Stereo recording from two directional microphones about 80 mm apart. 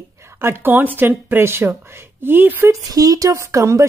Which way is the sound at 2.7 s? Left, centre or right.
Right.